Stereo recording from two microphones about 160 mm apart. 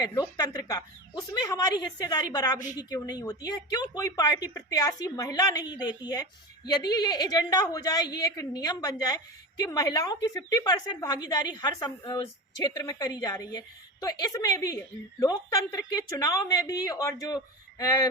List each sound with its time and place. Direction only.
0.3 s a woman's voice: 25° left (ahead or behind)